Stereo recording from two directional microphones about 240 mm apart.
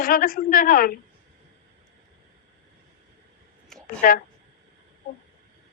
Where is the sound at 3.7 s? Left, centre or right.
Centre.